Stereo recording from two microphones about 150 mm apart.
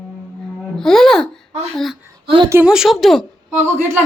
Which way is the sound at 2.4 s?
15° right (ahead or behind).